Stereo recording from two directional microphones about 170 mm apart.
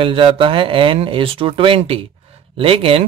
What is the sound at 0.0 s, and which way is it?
Speech, 30° right (ahead or behind).